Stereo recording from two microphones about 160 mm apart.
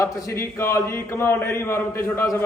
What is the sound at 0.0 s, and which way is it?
Speech, 15° left (ahead or behind).